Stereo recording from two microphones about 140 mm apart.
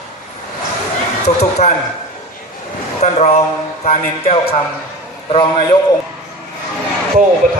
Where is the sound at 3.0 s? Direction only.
55° left (ahead or behind).